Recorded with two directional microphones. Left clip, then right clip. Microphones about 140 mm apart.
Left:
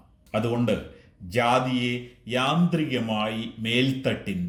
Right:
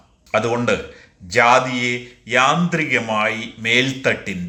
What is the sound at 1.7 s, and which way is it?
A man's voice, 10° left (ahead or behind).